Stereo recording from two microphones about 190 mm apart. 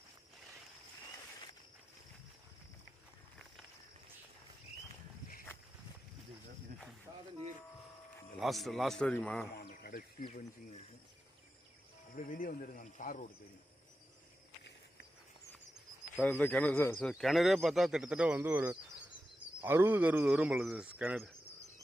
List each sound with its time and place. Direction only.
8.4 s speech: centre (ahead or behind)
9.6 s a sound: 55° left (ahead or behind)
12.1 s speech: 45° left (ahead or behind)
16.2 s speech: 10° left (ahead or behind)